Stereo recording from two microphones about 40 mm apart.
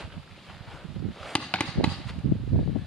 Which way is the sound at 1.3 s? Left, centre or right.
Left.